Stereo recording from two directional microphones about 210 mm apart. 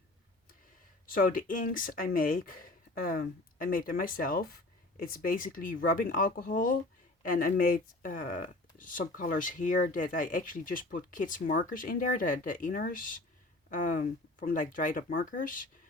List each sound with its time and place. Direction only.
1.0 s speech: 40° left (ahead or behind)